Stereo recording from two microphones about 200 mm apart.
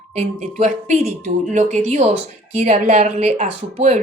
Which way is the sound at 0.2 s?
35° right (ahead or behind).